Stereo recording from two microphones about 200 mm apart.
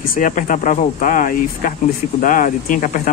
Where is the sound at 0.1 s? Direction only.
40° left (ahead or behind).